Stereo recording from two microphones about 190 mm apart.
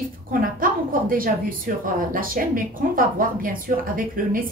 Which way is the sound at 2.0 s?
50° right (ahead or behind).